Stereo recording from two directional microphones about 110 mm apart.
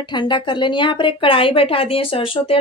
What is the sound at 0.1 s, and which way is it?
Speech, 45° left (ahead or behind).